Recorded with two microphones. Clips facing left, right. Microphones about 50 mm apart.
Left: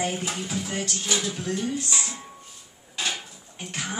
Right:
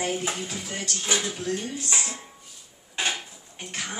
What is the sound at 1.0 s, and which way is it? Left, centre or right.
Speech, right.